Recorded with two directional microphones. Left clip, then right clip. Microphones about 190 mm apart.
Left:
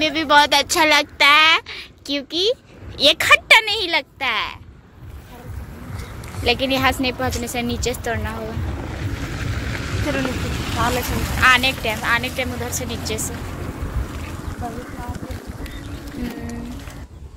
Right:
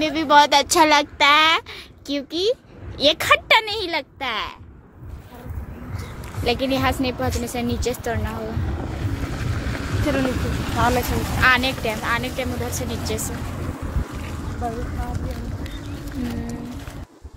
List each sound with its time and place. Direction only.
0.0 s a woman's voice: 10° right (ahead or behind)
6.4 s a woman's voice: 5° right (ahead or behind)
8.9 s boat: 55° right (ahead or behind)
11.3 s a woman's voice: 10° right (ahead or behind)